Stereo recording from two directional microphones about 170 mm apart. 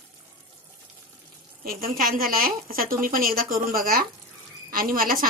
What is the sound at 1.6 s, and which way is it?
A woman's voice, 55° right (ahead or behind).